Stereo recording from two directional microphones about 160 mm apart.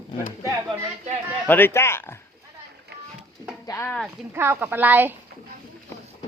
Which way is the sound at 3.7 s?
15° left (ahead or behind).